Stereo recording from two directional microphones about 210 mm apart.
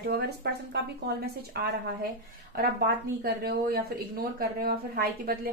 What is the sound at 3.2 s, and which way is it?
A woman's voice, 45° right (ahead or behind).